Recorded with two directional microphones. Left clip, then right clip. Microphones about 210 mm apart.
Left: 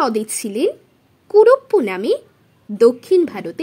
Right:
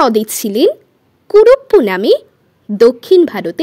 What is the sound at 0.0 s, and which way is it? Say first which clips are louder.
A woman's voice: right 7 dB; 40° right (ahead or behind).